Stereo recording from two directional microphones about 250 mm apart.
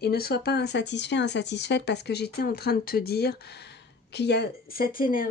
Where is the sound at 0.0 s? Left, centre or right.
Left.